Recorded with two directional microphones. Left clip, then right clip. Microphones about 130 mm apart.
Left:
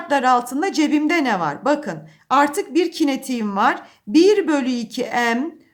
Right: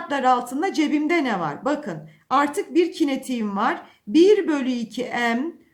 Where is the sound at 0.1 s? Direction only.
40° left (ahead or behind).